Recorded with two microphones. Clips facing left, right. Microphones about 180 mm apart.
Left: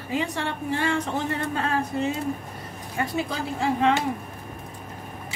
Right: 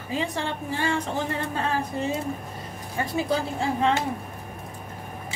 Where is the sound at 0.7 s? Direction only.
35° right (ahead or behind).